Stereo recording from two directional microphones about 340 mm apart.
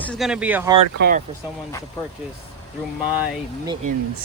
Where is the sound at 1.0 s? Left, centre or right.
Right.